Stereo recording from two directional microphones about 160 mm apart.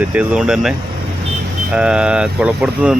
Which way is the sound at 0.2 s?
5° right (ahead or behind).